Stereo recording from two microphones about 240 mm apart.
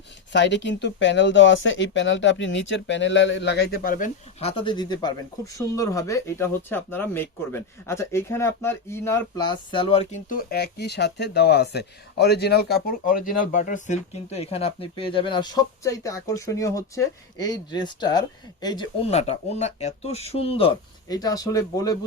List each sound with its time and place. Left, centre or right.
0.3 s speech: left; by 21.9 s centre